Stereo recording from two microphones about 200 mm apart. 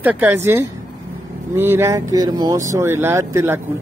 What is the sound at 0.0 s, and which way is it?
Speech, 10° right (ahead or behind).